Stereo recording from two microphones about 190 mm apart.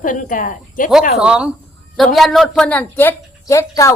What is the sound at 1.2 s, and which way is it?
A woman's voice, 5° right (ahead or behind).